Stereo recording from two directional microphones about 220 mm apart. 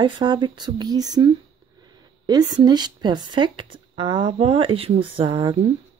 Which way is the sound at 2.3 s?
15° right (ahead or behind).